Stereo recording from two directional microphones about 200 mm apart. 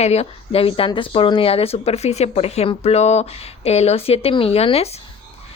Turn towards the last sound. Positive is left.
turn(degrees=30)  # may be behind; listen again after turning